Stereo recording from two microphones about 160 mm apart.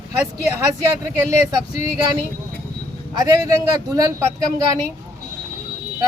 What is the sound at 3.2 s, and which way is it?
Speech, 20° right (ahead or behind).